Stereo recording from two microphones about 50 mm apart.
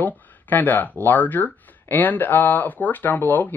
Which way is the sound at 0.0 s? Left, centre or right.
Left.